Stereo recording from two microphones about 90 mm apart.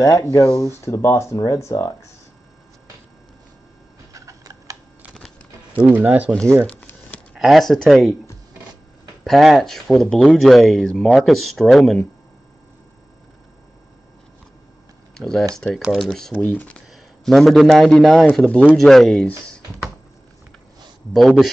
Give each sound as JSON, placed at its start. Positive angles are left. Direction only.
{"t": 0.3, "sound": "speech", "side_deg": 40}
{"t": 4.1, "sound": "typing", "side_deg": -40}
{"t": 5.9, "sound": "speech", "side_deg": -20}
{"t": 6.3, "sound": "speech", "side_deg": 10}
{"t": 9.2, "sound": "speech", "side_deg": 0}
{"t": 15.1, "sound": "speech", "side_deg": 5}
{"t": 16.9, "sound": "a man's voice", "side_deg": 5}
{"t": 18.3, "sound": "speech", "side_deg": 15}
{"t": 21.1, "sound": "speech", "side_deg": 0}